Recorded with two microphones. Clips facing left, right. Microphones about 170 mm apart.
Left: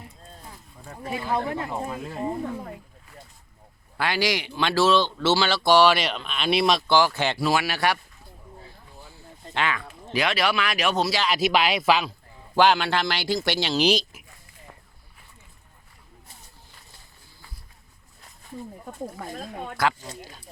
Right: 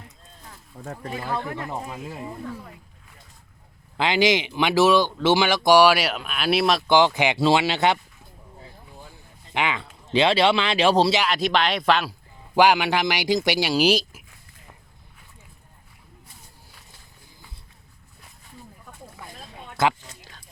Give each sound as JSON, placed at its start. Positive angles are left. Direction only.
{"t": 1.5, "sound": "speech", "side_deg": 30}
{"t": 3.9, "sound": "speech", "side_deg": -20}
{"t": 6.8, "sound": "speech", "side_deg": -15}
{"t": 7.3, "sound": "speech", "side_deg": -25}
{"t": 9.0, "sound": "a sound", "side_deg": -15}
{"t": 9.5, "sound": "speech", "side_deg": -15}
{"t": 11.3, "sound": "speech", "side_deg": 5}
{"t": 12.5, "sound": "speech", "side_deg": -15}
{"t": 18.9, "sound": "speech", "side_deg": 45}